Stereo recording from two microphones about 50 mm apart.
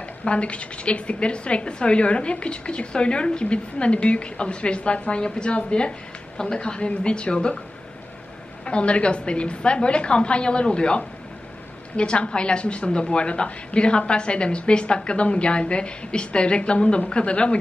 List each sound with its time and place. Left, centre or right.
0.2 s a woman's voice: left
8.6 s a woman's voice: left